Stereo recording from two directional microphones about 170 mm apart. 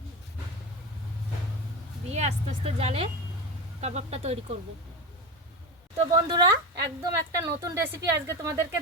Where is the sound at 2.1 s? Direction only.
40° right (ahead or behind).